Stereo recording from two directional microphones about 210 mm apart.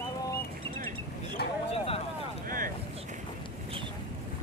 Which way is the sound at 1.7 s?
30° left (ahead or behind).